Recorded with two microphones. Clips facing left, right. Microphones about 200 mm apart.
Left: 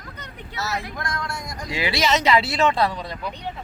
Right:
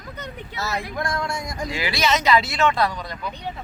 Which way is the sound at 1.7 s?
25° left (ahead or behind).